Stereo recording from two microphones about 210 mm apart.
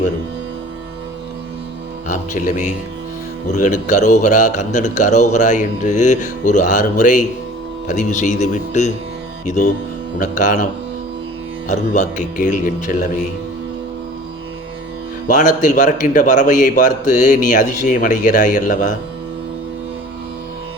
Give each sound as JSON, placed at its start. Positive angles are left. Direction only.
{"t": 2.0, "sound": "a man's voice", "side_deg": 40}
{"t": 10.2, "sound": "a man's voice", "side_deg": 40}
{"t": 11.7, "sound": "a man's voice", "side_deg": 35}
{"t": 15.3, "sound": "a man's voice", "side_deg": 40}